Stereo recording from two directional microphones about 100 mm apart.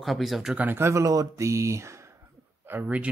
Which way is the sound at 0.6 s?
25° right (ahead or behind).